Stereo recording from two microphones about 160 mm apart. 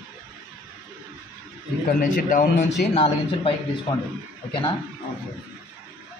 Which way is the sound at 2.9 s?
35° left (ahead or behind).